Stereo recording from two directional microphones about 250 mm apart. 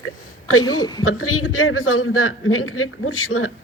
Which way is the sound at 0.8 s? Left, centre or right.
Centre.